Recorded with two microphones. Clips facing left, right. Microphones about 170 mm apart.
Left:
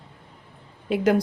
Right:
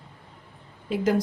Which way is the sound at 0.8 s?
70° left (ahead or behind).